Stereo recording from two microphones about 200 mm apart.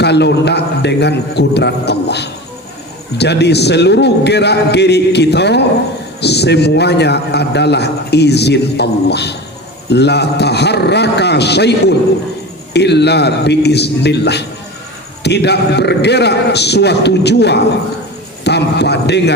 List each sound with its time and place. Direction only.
0.0 s a man's voice: 60° left (ahead or behind)